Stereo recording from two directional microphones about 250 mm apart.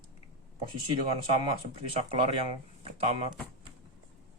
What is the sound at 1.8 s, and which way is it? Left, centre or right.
Speech, right.